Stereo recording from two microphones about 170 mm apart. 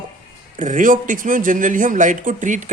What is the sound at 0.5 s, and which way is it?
Speech, 50° right (ahead or behind).